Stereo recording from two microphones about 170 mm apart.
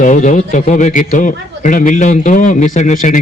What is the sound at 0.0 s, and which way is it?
A man's voice, 45° left (ahead or behind).